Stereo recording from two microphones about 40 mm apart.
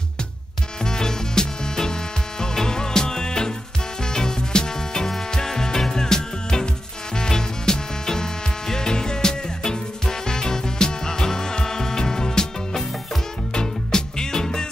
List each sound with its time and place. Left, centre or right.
0.8 s music: centre